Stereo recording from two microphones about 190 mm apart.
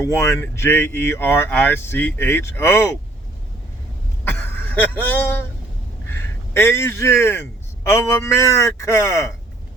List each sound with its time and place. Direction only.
0.0 s speech: 15° left (ahead or behind)
4.3 s a sound: 10° left (ahead or behind)
6.1 s speech: 10° left (ahead or behind)